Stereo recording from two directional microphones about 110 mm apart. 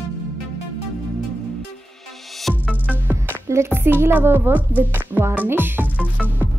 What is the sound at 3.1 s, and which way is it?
A woman's voice, 20° right (ahead or behind).